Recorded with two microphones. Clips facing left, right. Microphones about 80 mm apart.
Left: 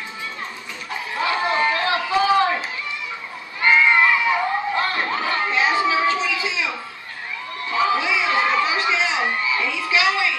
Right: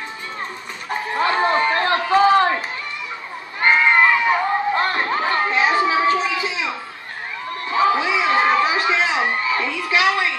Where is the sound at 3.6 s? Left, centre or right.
Right.